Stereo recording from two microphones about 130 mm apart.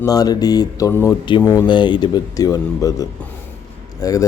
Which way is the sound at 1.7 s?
35° left (ahead or behind).